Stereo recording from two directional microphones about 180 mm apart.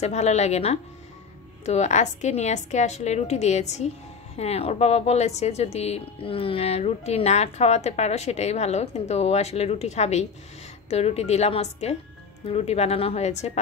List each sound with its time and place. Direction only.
0.0 s speech: 40° left (ahead or behind)